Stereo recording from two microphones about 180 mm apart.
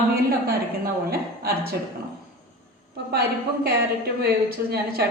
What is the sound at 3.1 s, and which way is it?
Speech, 60° right (ahead or behind).